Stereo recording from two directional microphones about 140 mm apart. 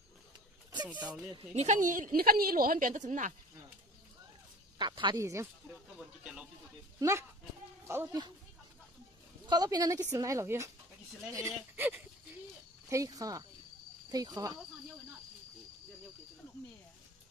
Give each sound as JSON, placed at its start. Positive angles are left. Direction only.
{"t": 1.0, "sound": "speech", "side_deg": -10}
{"t": 1.5, "sound": "a woman's voice", "side_deg": -55}
{"t": 4.7, "sound": "speech", "side_deg": -35}
{"t": 5.2, "sound": "a woman's voice", "side_deg": -20}
{"t": 7.0, "sound": "a woman's voice", "side_deg": -20}
{"t": 9.5, "sound": "a woman's voice", "side_deg": -30}